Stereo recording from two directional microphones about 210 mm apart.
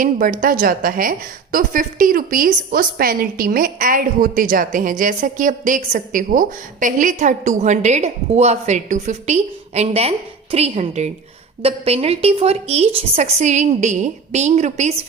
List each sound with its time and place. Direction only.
0.0 s a woman's voice: 40° right (ahead or behind)